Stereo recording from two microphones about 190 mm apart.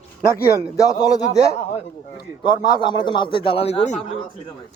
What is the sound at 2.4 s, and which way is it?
A man's voice, 25° left (ahead or behind).